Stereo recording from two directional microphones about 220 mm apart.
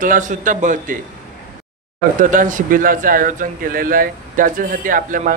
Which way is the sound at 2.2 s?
35° right (ahead or behind).